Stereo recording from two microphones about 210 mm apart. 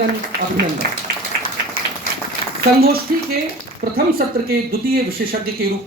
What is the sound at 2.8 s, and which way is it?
Speech, 45° right (ahead or behind).